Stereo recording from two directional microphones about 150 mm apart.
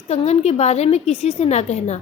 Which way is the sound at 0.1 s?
45° left (ahead or behind).